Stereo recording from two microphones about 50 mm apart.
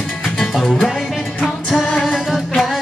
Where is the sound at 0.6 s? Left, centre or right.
Centre.